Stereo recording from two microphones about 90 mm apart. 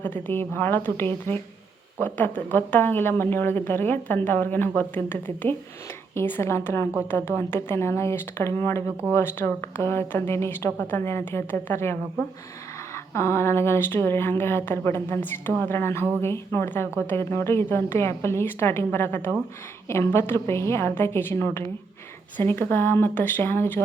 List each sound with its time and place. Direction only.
0.0 s speech: 20° left (ahead or behind)